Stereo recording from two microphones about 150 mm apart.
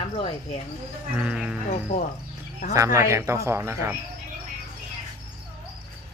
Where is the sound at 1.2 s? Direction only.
5° right (ahead or behind).